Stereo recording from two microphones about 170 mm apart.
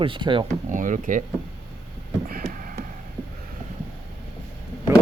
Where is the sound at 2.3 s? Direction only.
65° right (ahead or behind).